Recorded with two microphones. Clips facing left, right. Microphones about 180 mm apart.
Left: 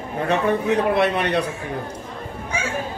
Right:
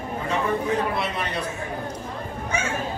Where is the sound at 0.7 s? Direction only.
65° left (ahead or behind).